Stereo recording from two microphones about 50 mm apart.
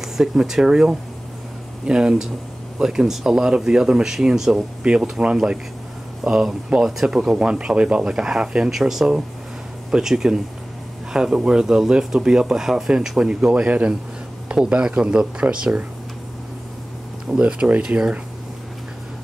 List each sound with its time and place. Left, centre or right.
0.0 s speech: centre
17.3 s speech: centre